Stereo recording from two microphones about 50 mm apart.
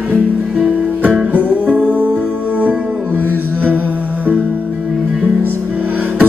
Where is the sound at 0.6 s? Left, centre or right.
Right.